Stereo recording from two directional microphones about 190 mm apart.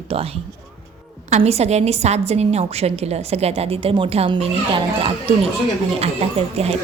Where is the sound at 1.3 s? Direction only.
35° right (ahead or behind).